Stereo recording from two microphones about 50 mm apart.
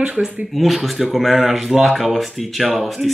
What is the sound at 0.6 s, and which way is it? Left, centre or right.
Speech, centre.